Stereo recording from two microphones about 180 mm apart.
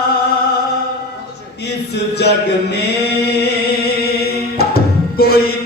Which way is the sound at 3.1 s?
65° left (ahead or behind).